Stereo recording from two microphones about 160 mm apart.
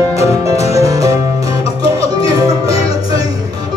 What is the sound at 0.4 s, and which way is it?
Music, 20° right (ahead or behind).